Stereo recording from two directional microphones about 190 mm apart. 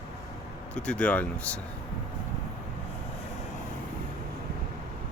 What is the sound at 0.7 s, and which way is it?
Speech, 5° left (ahead or behind).